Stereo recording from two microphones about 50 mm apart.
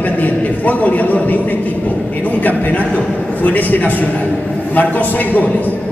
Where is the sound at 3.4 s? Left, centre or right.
Left.